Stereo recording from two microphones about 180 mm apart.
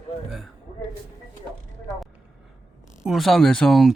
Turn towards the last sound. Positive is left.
turn(degrees=0)  # may be behind; listen again after turning